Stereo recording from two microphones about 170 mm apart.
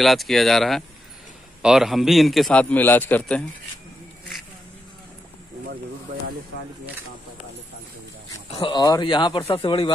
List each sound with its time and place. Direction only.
0.0 s a man's voice: centre (ahead or behind)
8.5 s speech: 30° left (ahead or behind)